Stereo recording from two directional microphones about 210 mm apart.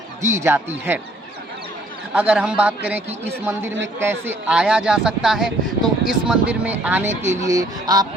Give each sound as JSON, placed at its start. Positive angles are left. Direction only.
{"t": 0.2, "sound": "a man's voice", "side_deg": -15}
{"t": 2.1, "sound": "a man's voice", "side_deg": -5}